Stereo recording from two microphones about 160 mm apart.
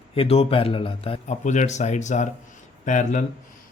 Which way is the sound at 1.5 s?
50° left (ahead or behind).